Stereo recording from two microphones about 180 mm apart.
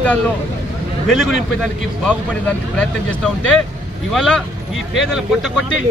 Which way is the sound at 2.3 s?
5° left (ahead or behind).